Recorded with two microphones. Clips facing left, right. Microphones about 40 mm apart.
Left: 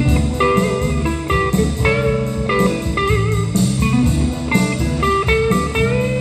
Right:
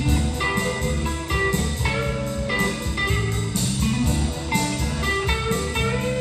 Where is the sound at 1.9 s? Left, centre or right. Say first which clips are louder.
Left 7 dB; left.